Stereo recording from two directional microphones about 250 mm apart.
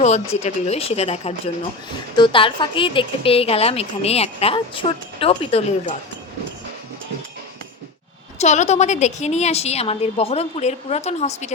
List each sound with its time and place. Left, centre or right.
0.0 s a woman's voice: left
8.4 s a woman's voice: left